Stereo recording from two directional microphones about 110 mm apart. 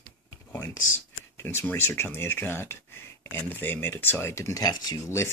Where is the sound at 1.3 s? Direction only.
20° left (ahead or behind).